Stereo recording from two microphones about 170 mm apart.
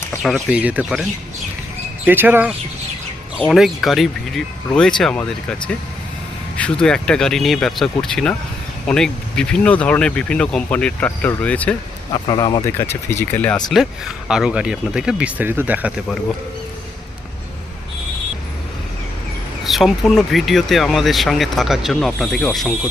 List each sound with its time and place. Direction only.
0.2 s speech: centre (ahead or behind)
2.0 s speech: 10° right (ahead or behind)
3.3 s speech: 5° left (ahead or behind)
12.1 s speech: 25° left (ahead or behind)
12.6 s speech: 15° left (ahead or behind)
13.7 s speech: centre (ahead or behind)
19.6 s speech: centre (ahead or behind)